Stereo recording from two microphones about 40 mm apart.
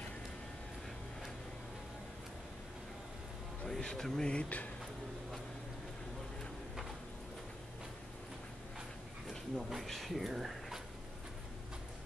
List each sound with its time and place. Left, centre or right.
3.6 s speech: centre
4.3 s speech: left
9.6 s speech: centre